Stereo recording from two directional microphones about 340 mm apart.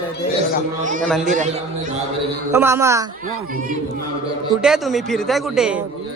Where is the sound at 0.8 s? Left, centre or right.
Right.